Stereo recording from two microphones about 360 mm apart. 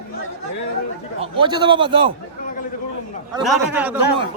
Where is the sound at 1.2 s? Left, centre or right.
Centre.